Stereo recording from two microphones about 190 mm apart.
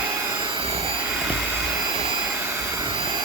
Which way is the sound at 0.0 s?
15° right (ahead or behind).